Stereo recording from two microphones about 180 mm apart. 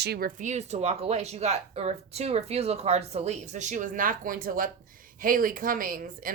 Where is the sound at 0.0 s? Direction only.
60° right (ahead or behind).